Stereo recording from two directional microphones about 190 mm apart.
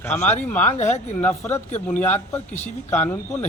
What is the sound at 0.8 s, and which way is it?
Speech, 35° left (ahead or behind).